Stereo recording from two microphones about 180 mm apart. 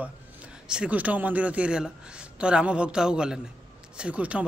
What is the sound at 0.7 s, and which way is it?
Speech, 5° right (ahead or behind).